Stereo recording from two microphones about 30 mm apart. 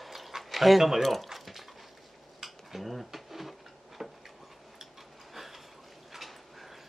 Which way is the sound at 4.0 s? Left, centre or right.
Centre.